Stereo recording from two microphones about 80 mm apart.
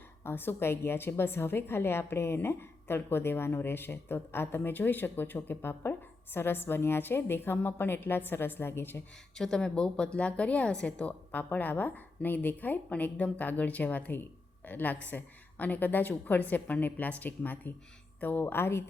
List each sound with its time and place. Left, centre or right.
0.3 s a woman's voice: left
9.4 s a woman's voice: centre; by 18.9 s left